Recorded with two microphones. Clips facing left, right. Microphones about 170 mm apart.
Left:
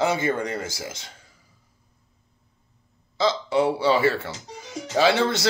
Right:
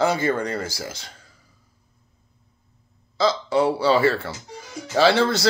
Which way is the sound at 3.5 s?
20° left (ahead or behind).